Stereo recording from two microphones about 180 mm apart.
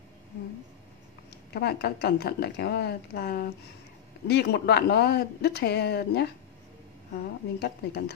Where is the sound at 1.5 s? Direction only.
65° left (ahead or behind).